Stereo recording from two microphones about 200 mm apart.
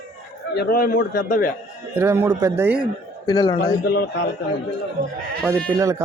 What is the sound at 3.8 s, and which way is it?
Speech, 60° left (ahead or behind).